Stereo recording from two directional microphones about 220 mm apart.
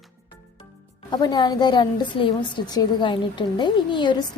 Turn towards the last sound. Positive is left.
turn(degrees=20)  # may be behind; listen again after turning